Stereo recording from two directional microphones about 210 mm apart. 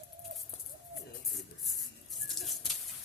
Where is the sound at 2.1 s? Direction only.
Centre (ahead or behind).